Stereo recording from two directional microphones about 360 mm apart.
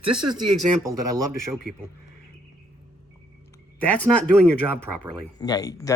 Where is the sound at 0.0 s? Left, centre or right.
Right.